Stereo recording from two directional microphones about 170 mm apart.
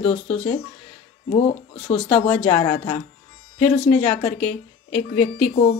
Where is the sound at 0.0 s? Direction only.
35° left (ahead or behind).